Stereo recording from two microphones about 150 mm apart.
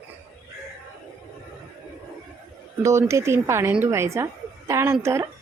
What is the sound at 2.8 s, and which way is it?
A woman's voice, 20° right (ahead or behind).